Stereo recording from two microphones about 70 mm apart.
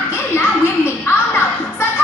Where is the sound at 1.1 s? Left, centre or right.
Left.